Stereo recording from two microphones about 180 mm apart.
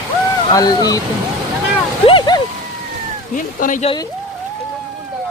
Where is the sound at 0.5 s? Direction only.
20° left (ahead or behind).